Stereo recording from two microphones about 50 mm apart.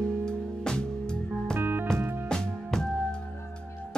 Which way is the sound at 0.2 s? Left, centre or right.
Centre.